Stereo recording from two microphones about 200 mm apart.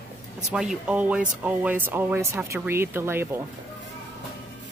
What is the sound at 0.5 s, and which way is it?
Speech, 5° right (ahead or behind).